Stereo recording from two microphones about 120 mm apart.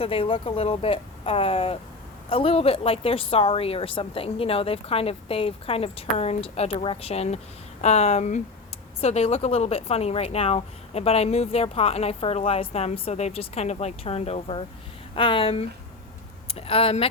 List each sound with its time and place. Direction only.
0.0 s a woman's voice: 50° left (ahead or behind); by 8.4 s 75° left (ahead or behind)
9.0 s a woman's voice: 65° left (ahead or behind)